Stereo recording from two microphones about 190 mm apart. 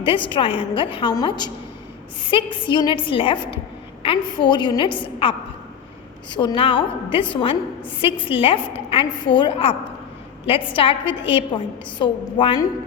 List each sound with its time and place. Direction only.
0.3 s a woman's voice: 25° left (ahead or behind)